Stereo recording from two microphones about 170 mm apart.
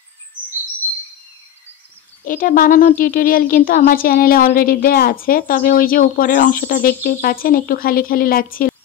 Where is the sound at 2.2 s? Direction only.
55° left (ahead or behind).